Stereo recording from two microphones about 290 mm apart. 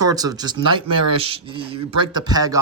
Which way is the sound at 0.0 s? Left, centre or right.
Centre.